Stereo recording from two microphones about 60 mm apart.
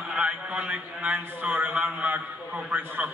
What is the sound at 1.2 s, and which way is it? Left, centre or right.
A man's voice, right.